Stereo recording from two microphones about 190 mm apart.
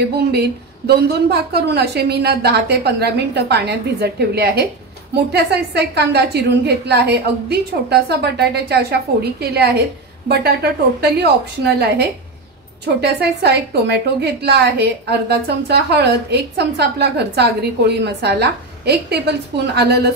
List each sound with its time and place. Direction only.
0.1 s a woman's voice: 60° right (ahead or behind)